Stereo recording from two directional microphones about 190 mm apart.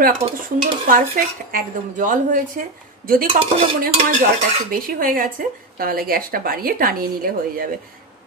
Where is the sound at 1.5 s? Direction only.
45° right (ahead or behind).